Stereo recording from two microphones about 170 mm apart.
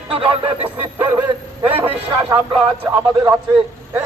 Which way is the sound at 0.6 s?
10° right (ahead or behind).